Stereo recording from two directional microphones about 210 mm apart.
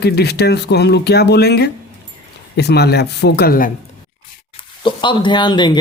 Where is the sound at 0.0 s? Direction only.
50° left (ahead or behind).